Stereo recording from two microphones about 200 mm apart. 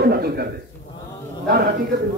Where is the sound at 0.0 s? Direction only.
50° right (ahead or behind).